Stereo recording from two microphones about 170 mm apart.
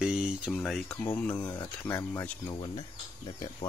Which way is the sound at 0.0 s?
5° right (ahead or behind).